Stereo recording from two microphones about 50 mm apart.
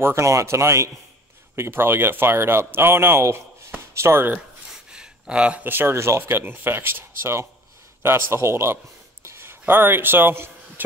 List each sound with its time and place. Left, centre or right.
0.0 s speech: right
1.5 s speech: right
4.9 s a sound: centre
5.6 s speech: right
5.9 s a man's voice: right